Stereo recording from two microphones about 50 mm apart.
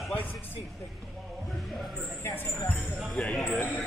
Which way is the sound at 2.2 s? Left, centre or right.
Left.